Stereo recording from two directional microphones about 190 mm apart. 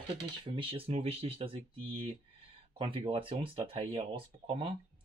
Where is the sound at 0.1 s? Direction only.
25° right (ahead or behind).